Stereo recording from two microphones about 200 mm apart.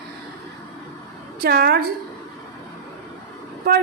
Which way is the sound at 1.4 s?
50° right (ahead or behind).